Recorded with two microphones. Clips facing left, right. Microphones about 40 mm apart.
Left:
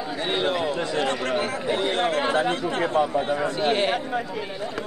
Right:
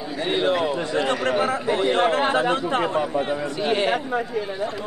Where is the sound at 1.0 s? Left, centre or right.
Right.